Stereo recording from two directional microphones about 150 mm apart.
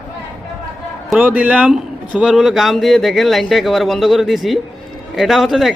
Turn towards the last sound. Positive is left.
turn(degrees=0)  # may be behind; listen again after turning